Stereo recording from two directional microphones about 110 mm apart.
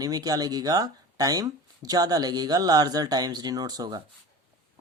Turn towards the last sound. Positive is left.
turn(degrees=-35)  # may be behind; listen again after turning